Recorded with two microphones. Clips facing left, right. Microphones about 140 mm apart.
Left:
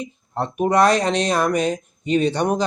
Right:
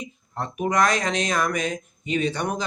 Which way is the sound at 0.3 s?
30° left (ahead or behind).